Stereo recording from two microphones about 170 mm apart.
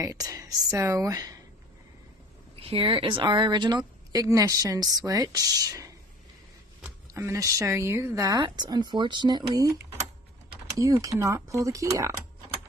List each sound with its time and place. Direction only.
0.0 s a woman's voice: 20° right (ahead or behind)
2.5 s a woman's voice: 35° right (ahead or behind); by 12.2 s 20° right (ahead or behind)